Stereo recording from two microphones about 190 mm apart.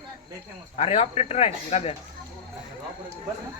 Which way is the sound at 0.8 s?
35° left (ahead or behind).